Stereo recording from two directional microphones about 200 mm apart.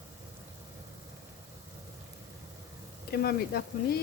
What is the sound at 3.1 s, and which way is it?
Speech, 50° left (ahead or behind).